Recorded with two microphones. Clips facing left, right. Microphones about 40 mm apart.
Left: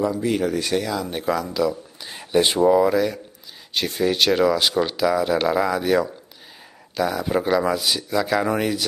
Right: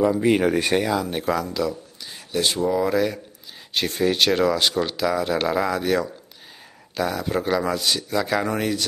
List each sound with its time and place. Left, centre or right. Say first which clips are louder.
0.2 s speech: right 3 dB; right
1.0 s speech: even; centre
2.0 s speech: left 4 dB; left
2.8 s speech: left 2 dB; centre